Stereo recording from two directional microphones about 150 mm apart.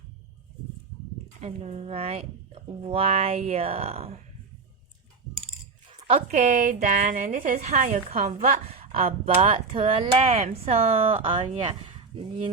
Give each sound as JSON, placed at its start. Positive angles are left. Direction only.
{"t": 1.4, "sound": "speech", "side_deg": -45}
{"t": 6.2, "sound": "a woman's voice", "side_deg": -55}
{"t": 8.5, "sound": "a sound", "side_deg": -40}
{"t": 9.2, "sound": "speech", "side_deg": -40}